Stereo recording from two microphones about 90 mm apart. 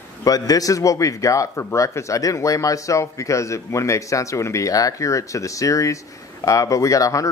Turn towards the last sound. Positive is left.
turn(degrees=40)  # may be behind; listen again after turning